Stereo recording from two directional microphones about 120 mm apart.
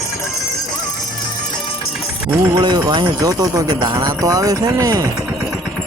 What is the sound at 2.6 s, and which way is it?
Speech, 40° right (ahead or behind).